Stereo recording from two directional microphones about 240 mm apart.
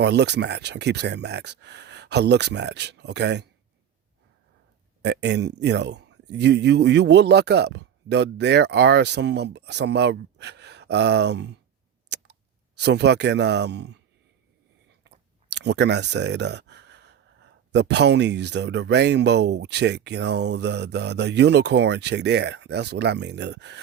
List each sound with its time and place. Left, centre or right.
0.0 s speech: right
5.0 s speech: right
12.0 s a sound: right
15.4 s speech: right